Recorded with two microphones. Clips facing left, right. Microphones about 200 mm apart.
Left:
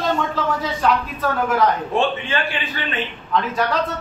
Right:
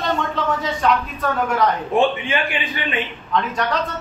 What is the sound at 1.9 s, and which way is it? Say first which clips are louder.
A man's voice: right 2 dB; 15° right (ahead or behind).